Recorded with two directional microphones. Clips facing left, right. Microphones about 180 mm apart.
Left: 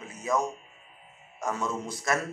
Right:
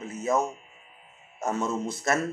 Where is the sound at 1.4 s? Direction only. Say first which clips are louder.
Right 3 dB; 25° right (ahead or behind).